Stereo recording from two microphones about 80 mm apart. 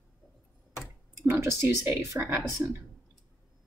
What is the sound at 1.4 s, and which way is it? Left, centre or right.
Speech, right.